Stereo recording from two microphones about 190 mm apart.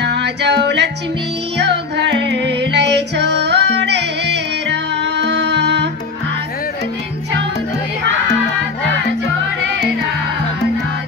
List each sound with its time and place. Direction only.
0.0 s music: 65° right (ahead or behind)